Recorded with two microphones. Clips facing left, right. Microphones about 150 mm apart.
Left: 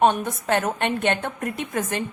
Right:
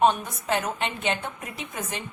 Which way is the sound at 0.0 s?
55° left (ahead or behind).